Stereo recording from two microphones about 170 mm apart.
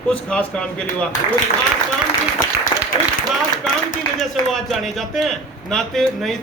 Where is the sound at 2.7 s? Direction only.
20° left (ahead or behind).